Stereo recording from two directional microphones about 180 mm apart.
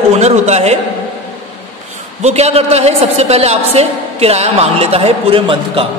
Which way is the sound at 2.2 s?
35° right (ahead or behind).